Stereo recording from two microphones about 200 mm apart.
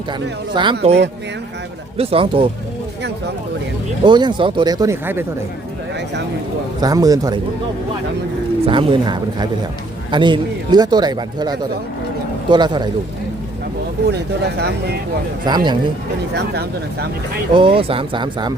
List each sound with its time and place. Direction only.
0.5 s speech: 25° right (ahead or behind)
2.0 s speech: 30° right (ahead or behind)
4.0 s speech: 25° right (ahead or behind)
6.8 s speech: 20° right (ahead or behind)
8.6 s speech: 25° right (ahead or behind)
14.1 s speech: 55° right (ahead or behind)
15.4 s speech: 20° right (ahead or behind)
16.3 s speech: 55° right (ahead or behind)
17.5 s speech: 25° right (ahead or behind)